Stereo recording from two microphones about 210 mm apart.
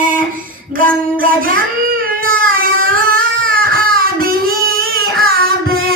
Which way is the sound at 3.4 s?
45° right (ahead or behind).